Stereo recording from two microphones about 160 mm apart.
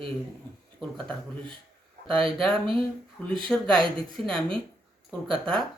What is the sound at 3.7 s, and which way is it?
Speech, 30° right (ahead or behind).